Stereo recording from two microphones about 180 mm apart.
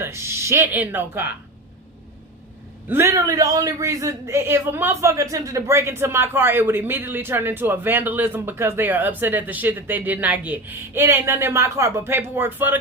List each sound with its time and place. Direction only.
0.0 s a man's voice: 15° right (ahead or behind)
2.9 s a man's voice: 15° right (ahead or behind)